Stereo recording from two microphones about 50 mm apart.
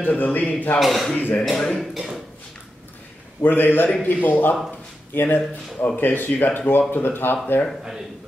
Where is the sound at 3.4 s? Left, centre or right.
Left.